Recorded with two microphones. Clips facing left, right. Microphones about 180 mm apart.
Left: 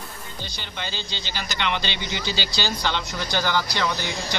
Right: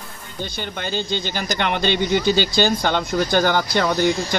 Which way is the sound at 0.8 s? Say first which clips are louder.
Right 9 dB; 50° right (ahead or behind).